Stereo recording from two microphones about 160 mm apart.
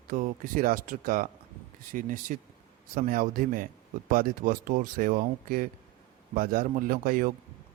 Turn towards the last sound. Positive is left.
turn(degrees=-60)  # may be behind; listen again after turning